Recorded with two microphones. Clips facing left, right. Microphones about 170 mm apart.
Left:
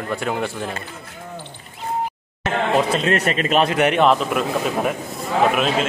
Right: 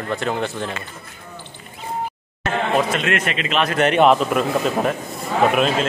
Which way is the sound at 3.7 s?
10° left (ahead or behind).